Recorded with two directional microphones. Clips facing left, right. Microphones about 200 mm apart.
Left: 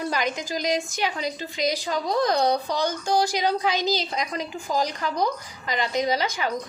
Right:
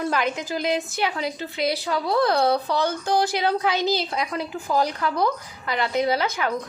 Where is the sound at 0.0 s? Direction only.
5° right (ahead or behind).